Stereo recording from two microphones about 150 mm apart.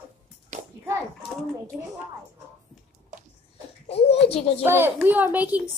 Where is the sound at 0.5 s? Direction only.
50° right (ahead or behind).